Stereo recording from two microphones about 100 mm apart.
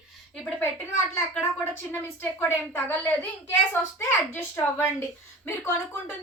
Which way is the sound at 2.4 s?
20° left (ahead or behind).